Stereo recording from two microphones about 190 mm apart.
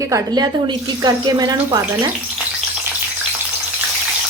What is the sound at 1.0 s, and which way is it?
Speech, 20° right (ahead or behind).